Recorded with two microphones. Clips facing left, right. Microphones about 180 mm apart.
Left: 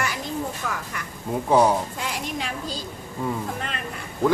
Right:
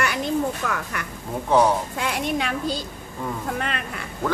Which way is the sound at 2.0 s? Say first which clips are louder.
Right 5 dB; 65° right (ahead or behind).